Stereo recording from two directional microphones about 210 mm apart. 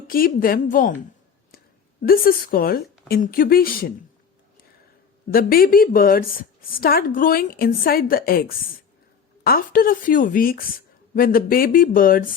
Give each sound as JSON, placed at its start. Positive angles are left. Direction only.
{"t": 0.1, "sound": "a woman's voice", "side_deg": 45}
{"t": 1.5, "sound": "a sound", "side_deg": 45}
{"t": 3.1, "sound": "a woman's voice", "side_deg": 40}
{"t": 5.3, "sound": "a woman's voice", "side_deg": 45}